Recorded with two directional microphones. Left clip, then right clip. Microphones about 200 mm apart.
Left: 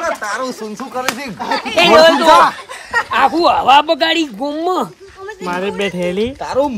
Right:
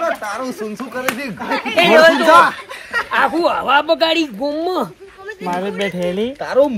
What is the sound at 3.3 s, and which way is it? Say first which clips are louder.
Speech: left 5 dB; 15° left (ahead or behind).